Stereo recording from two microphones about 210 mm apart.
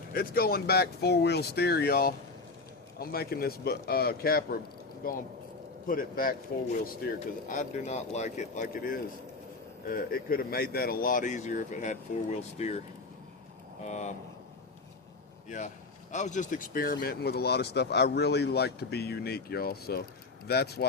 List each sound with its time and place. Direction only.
0.1 s speech: 45° left (ahead or behind)
13.8 s speech: 35° left (ahead or behind)
15.4 s a man's voice: 35° left (ahead or behind)